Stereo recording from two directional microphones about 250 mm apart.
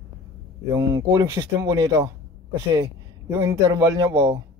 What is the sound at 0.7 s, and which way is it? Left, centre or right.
A man's voice, centre.